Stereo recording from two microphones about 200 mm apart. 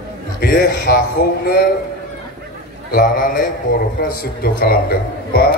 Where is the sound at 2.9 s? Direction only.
45° left (ahead or behind).